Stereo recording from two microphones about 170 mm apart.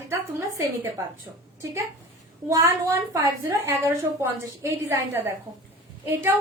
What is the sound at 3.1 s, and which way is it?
A woman's voice, 20° right (ahead or behind).